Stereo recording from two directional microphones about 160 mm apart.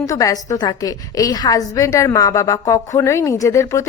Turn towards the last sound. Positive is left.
turn(degrees=20)  # may be behind; listen again after turning